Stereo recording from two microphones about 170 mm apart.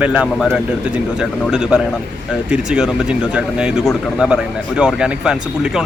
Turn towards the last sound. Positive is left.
turn(degrees=-5)  # may be behind; listen again after turning